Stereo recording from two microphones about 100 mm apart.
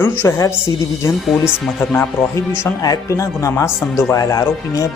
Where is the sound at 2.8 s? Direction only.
35° left (ahead or behind).